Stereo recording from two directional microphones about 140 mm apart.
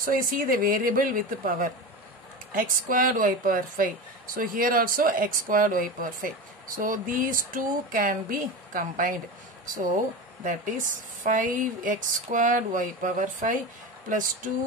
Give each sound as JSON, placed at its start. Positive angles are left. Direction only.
{"t": 0.0, "sound": "speech", "side_deg": -85}